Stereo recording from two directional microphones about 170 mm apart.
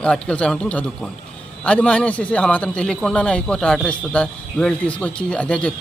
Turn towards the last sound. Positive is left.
turn(degrees=5)  # may be behind; listen again after turning